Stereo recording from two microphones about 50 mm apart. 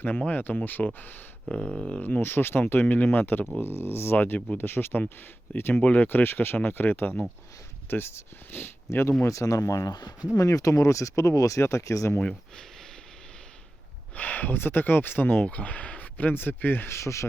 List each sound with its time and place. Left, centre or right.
0.3 s speech: left
1.5 s a sound: left
1.9 s speech: left
2.2 s speech: left
9.2 s speech: left
14.2 s speech: left
15.4 s speech: left
16.9 s speech: left